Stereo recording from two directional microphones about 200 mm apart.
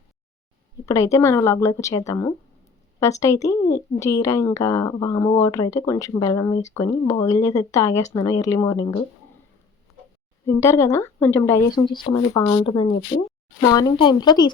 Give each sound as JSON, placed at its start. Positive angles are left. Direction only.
{"t": 0.9, "sound": "speech", "side_deg": 15}
{"t": 10.4, "sound": "speech", "side_deg": 15}